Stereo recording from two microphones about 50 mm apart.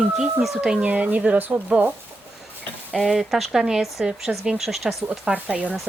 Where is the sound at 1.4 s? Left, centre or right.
Right.